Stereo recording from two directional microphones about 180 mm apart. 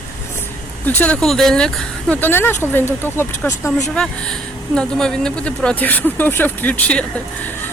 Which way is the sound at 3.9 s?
5° left (ahead or behind).